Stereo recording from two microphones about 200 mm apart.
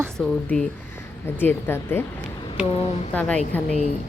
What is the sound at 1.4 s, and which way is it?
Speech, 10° left (ahead or behind).